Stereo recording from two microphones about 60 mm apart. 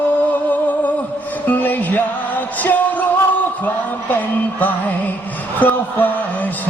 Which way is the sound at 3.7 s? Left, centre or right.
Left.